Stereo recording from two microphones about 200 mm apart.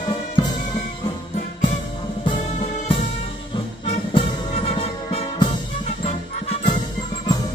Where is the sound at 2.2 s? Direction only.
25° left (ahead or behind).